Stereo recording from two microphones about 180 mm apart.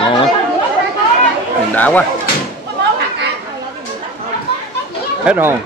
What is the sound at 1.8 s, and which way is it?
Speech, 10° left (ahead or behind).